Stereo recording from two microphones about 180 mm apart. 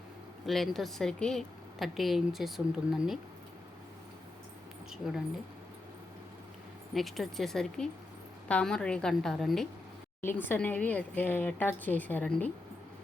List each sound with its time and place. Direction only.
0.4 s a woman's voice: centre (ahead or behind)
4.9 s a woman's voice: 5° right (ahead or behind)
6.9 s a woman's voice: centre (ahead or behind)
10.2 s a woman's voice: 10° left (ahead or behind)